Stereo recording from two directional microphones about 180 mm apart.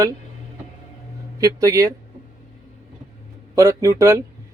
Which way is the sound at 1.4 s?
20° right (ahead or behind).